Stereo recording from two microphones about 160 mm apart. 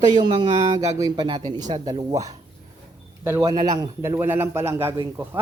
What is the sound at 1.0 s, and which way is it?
Speech, 25° right (ahead or behind).